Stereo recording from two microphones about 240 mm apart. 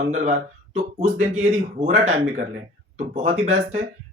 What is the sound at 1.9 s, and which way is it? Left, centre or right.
Speech, right.